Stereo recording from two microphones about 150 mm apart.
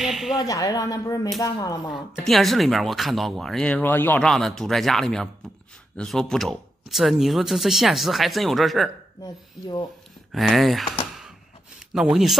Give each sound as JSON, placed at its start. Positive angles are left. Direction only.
{"t": 0.0, "sound": "speech", "side_deg": 0}
{"t": 0.4, "sound": "speech", "side_deg": 20}
{"t": 1.9, "sound": "speech", "side_deg": 0}
{"t": 4.3, "sound": "speech", "side_deg": 0}
{"t": 9.2, "sound": "speech", "side_deg": 30}
{"t": 10.3, "sound": "speech", "side_deg": 0}
{"t": 11.9, "sound": "speech", "side_deg": -5}